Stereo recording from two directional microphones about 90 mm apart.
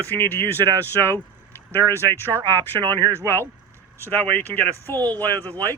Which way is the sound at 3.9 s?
20° left (ahead or behind).